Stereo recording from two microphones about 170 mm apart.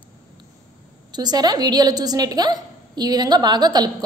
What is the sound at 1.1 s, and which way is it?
A woman's voice, 25° right (ahead or behind).